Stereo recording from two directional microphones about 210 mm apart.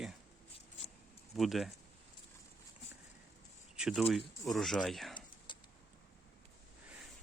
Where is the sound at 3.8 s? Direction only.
5° right (ahead or behind).